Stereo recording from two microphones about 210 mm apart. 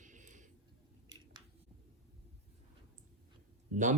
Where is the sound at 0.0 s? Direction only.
35° right (ahead or behind).